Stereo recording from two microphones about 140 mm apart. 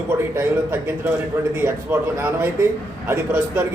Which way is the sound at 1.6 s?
15° right (ahead or behind).